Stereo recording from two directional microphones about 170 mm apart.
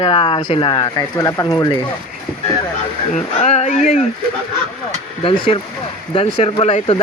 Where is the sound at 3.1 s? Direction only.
40° left (ahead or behind).